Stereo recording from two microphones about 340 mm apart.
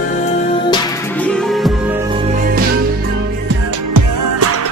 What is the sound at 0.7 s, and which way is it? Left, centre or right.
Music, centre.